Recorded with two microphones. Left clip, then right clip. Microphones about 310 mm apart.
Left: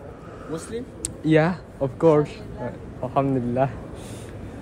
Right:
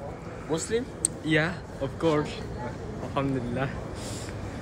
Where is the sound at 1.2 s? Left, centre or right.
Centre.